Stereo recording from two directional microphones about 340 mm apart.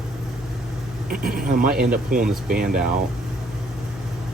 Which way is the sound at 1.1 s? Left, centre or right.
Right.